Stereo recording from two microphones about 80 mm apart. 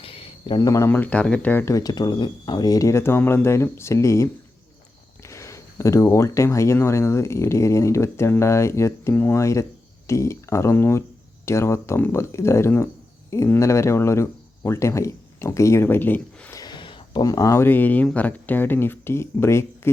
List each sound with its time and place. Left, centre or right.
0.6 s speech: left
0.9 s speech: left
1.6 s speech: left
5.3 s speech: left
15.8 s speech: left
16.6 s a sound: left
17.2 s speech: left
17.6 s speech: left